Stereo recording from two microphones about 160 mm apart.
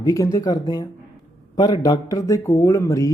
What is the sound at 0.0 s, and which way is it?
Speech, 20° left (ahead or behind).